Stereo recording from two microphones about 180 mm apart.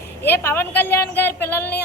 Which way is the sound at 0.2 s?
10° left (ahead or behind).